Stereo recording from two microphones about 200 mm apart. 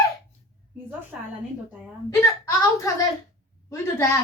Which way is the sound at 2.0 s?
15° left (ahead or behind).